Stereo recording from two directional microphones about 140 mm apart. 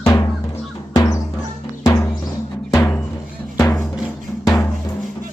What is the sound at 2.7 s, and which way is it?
Music, 20° left (ahead or behind).